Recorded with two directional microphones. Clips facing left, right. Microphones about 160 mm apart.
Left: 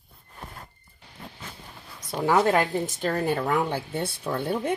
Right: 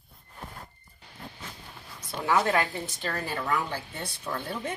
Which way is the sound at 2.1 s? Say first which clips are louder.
Left 4 dB; 40° left (ahead or behind).